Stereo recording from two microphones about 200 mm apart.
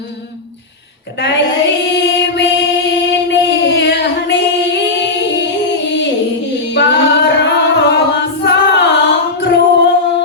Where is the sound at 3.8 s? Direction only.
60° left (ahead or behind).